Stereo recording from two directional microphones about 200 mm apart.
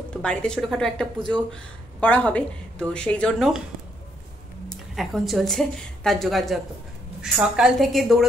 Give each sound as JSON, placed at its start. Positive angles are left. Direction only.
{"t": 0.2, "sound": "a woman's voice", "side_deg": 5}
{"t": 4.6, "sound": "a woman's voice", "side_deg": 0}